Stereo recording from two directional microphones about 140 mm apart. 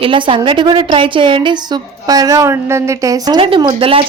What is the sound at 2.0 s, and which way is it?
A woman's voice, 25° right (ahead or behind).